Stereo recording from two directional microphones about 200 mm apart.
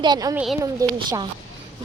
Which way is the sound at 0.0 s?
20° right (ahead or behind).